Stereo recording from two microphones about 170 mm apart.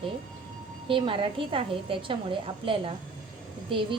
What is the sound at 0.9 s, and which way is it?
A woman's voice, 30° right (ahead or behind).